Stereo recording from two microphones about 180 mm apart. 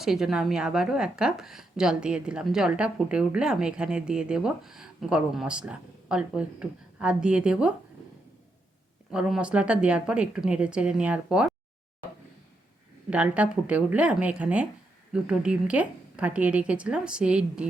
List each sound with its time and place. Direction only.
0.0 s a woman's voice: 5° right (ahead or behind)
9.1 s a woman's voice: 5° right (ahead or behind)
13.1 s a woman's voice: 5° right (ahead or behind)